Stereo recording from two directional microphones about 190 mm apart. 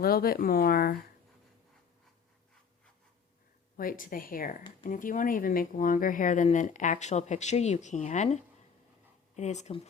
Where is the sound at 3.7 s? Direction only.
45° left (ahead or behind).